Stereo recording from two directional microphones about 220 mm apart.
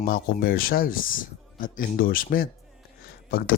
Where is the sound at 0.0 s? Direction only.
40° left (ahead or behind).